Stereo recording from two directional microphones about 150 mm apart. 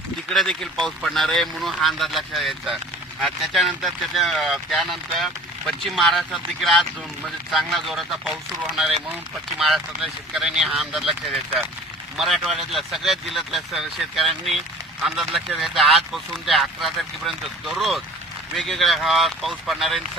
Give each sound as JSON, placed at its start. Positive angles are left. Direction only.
{"t": 0.3, "sound": "speech", "side_deg": 5}
{"t": 9.6, "sound": "speech", "side_deg": 0}